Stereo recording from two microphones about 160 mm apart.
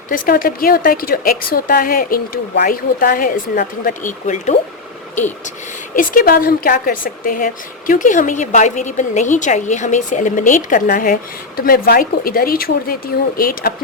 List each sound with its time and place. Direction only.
0.1 s a woman's voice: 65° left (ahead or behind)
4.0 s speech: 50° left (ahead or behind)
5.9 s a woman's voice: 65° left (ahead or behind)